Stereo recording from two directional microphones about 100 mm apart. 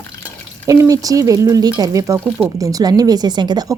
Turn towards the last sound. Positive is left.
turn(degrees=-45)  # may be behind; listen again after turning